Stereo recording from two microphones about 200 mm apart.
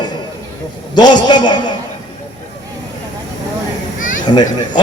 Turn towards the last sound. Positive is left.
turn(degrees=20)  # may be behind; listen again after turning